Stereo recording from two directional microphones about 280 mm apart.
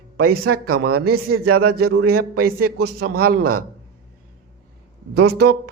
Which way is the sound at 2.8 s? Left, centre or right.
Right.